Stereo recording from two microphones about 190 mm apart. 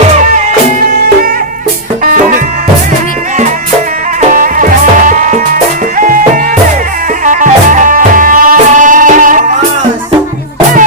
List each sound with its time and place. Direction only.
2.0 s music: 45° right (ahead or behind)
4.2 s music: 45° right (ahead or behind)